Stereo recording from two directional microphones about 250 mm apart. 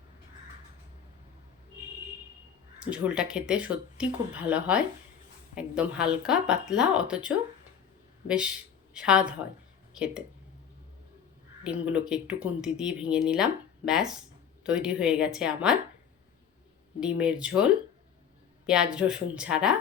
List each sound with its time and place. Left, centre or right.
2.8 s speech: centre
11.6 s speech: centre
17.0 s speech: centre